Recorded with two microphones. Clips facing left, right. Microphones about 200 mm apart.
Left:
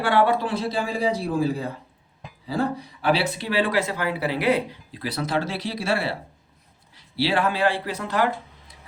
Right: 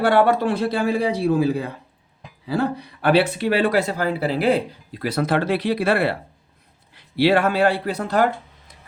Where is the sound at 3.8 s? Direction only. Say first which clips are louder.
Right 3 dB; 35° right (ahead or behind).